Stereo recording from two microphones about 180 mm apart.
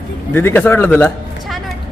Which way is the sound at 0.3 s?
10° left (ahead or behind).